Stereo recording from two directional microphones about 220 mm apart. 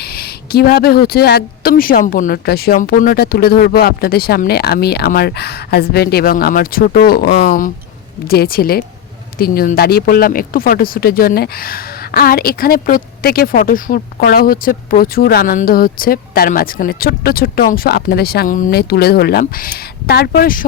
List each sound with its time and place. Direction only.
0.0 s speech: 45° left (ahead or behind)